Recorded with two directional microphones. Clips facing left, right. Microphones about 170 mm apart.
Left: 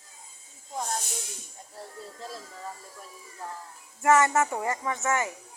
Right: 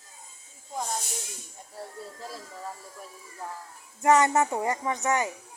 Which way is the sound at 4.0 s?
20° right (ahead or behind).